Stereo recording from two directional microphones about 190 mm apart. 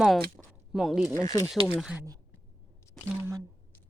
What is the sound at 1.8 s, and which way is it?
Speech, 5° right (ahead or behind).